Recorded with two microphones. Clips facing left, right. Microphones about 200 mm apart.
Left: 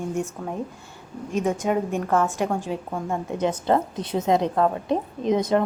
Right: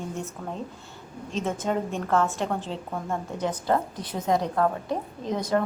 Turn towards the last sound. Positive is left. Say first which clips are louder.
# left 5 dB
turn(degrees=20)  # may be behind; listen again after turning